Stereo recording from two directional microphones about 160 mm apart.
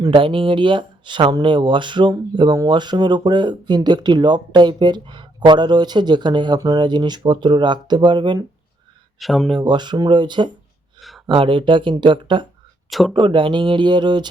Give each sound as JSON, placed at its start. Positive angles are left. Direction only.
{"t": 0.1, "sound": "speech", "side_deg": -35}
{"t": 9.1, "sound": "speech", "side_deg": 0}
{"t": 9.6, "sound": "speech", "side_deg": -30}
{"t": 12.9, "sound": "speech", "side_deg": 0}
{"t": 13.1, "sound": "speech", "side_deg": -30}